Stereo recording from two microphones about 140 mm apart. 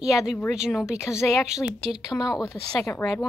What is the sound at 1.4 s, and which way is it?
A woman's voice, 5° right (ahead or behind).